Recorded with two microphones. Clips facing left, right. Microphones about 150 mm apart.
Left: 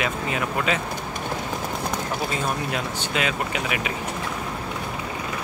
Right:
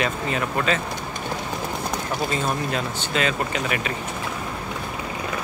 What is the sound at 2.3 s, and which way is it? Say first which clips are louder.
Speech: right 2 dB; 10° left (ahead or behind).